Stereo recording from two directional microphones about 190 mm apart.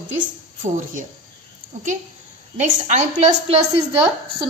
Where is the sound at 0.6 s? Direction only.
45° right (ahead or behind).